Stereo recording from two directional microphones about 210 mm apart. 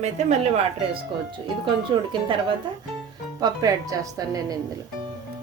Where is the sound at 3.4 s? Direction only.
15° right (ahead or behind).